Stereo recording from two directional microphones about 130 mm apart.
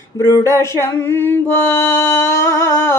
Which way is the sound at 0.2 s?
20° left (ahead or behind).